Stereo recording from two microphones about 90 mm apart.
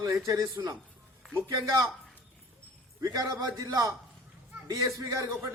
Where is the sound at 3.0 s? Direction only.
45° right (ahead or behind).